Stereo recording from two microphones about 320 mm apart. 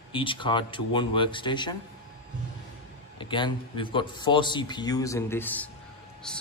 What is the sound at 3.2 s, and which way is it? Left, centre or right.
Speech, centre.